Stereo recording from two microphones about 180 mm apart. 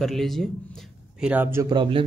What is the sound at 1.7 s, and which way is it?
Speech, 30° right (ahead or behind).